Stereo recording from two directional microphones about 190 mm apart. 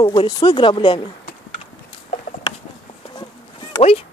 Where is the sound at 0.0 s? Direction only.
25° left (ahead or behind).